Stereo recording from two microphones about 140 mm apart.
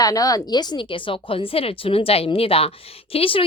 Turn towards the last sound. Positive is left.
turn(degrees=40)  # may be behind; listen again after turning